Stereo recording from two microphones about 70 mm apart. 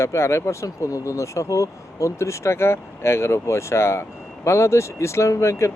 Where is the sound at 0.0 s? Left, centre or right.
Left.